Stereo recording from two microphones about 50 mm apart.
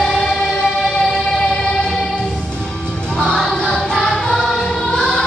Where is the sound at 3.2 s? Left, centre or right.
Centre.